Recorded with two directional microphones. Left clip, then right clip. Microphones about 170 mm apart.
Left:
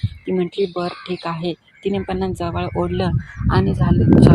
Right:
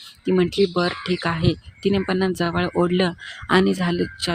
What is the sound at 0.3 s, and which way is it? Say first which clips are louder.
Speech: right 1 dB; 25° right (ahead or behind).